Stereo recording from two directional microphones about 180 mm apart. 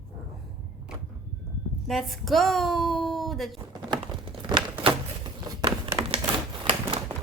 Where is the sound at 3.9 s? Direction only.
30° right (ahead or behind).